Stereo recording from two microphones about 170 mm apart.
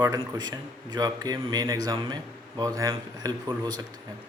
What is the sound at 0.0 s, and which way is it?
Speech, 20° right (ahead or behind).